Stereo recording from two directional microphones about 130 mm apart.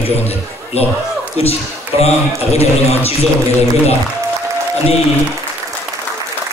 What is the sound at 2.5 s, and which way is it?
Speech, 55° left (ahead or behind).